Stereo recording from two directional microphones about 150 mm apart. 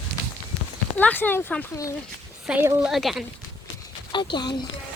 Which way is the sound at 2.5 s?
10° right (ahead or behind).